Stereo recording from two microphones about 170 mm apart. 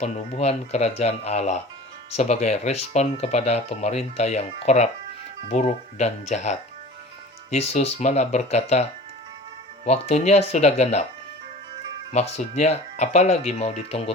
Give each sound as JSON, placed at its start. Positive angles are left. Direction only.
{"t": 0.0, "sound": "speech", "side_deg": 40}
{"t": 9.8, "sound": "speech", "side_deg": 40}
{"t": 12.1, "sound": "speech", "side_deg": 40}